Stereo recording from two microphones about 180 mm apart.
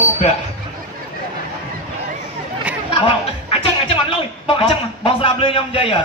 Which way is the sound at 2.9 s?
30° left (ahead or behind).